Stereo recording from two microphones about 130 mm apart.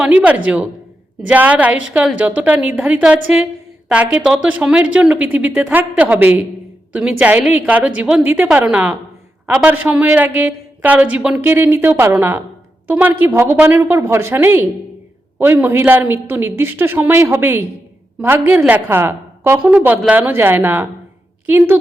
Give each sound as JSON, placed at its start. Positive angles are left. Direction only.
{"t": 0.0, "sound": "speech", "side_deg": -10}